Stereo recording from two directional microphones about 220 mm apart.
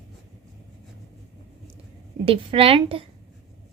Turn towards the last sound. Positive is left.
turn(degrees=-25)  # may be behind; listen again after turning